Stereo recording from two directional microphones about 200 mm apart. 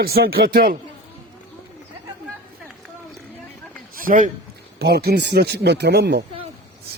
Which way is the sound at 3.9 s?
45° right (ahead or behind).